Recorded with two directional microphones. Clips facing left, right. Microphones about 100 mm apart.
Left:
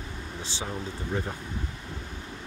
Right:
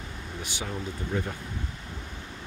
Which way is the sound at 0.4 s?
30° left (ahead or behind).